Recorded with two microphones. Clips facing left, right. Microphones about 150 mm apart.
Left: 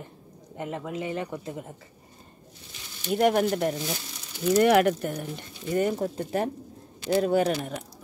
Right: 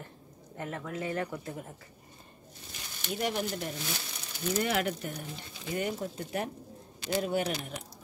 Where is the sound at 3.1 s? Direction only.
60° left (ahead or behind).